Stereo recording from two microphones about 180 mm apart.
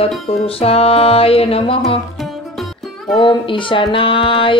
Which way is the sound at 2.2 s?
Centre (ahead or behind).